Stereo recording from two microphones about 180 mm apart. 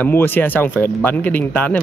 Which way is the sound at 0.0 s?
10° left (ahead or behind).